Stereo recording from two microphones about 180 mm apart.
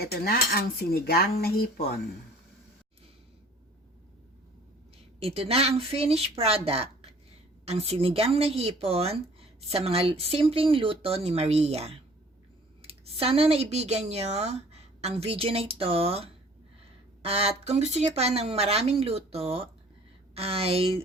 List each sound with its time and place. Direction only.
0.0 s dishes: 60° left (ahead or behind)
5.2 s speech: 35° right (ahead or behind)